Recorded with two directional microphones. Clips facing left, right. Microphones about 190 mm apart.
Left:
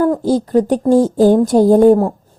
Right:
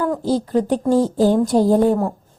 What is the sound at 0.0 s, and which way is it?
A woman's voice, 45° left (ahead or behind).